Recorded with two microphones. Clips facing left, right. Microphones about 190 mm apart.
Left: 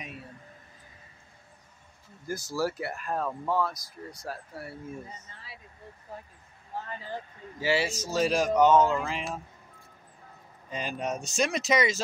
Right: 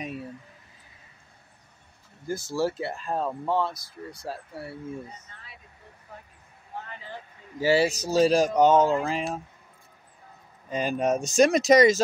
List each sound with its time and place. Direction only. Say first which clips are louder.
2.2 s speech: right 3 dB; 25° right (ahead or behind)
7.6 s speech: right 6 dB; 40° right (ahead or behind)
10.7 s speech: right 8 dB; 45° right (ahead or behind)